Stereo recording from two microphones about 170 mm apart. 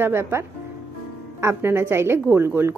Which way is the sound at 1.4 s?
15° right (ahead or behind).